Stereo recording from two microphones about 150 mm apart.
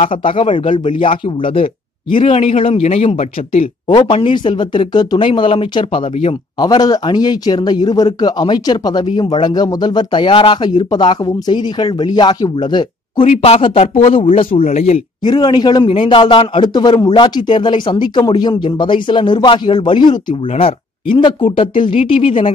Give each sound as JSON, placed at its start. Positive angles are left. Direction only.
{"t": 0.1, "sound": "a man's voice", "side_deg": 35}
{"t": 3.8, "sound": "speech", "side_deg": 35}
{"t": 13.2, "sound": "a man's voice", "side_deg": 50}
{"t": 15.2, "sound": "a man's voice", "side_deg": 30}